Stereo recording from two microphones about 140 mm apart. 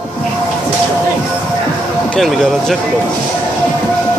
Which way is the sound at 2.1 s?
5° left (ahead or behind).